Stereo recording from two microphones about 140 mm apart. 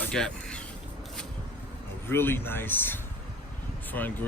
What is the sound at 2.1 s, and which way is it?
Speech, 15° left (ahead or behind).